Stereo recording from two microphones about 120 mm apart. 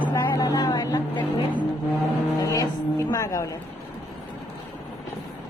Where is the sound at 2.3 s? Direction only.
30° left (ahead or behind).